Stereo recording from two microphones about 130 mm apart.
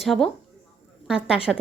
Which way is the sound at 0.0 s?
Centre (ahead or behind).